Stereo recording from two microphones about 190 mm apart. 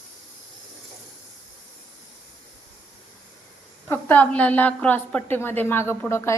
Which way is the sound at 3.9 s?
10° left (ahead or behind).